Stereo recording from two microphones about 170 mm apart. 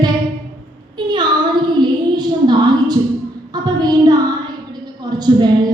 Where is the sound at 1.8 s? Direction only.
25° right (ahead or behind).